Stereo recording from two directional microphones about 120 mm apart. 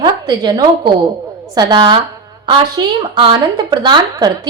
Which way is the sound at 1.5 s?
40° right (ahead or behind).